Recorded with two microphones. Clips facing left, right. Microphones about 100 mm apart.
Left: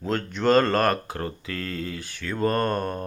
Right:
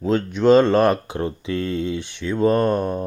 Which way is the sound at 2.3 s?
5° right (ahead or behind).